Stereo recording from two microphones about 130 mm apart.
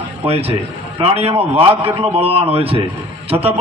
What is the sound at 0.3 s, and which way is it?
A man's voice, 50° right (ahead or behind).